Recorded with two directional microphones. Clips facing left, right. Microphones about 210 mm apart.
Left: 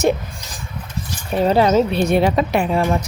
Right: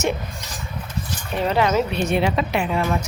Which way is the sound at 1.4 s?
35° left (ahead or behind).